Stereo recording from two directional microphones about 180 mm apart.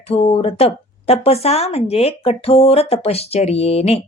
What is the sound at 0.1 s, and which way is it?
Speech, 35° left (ahead or behind).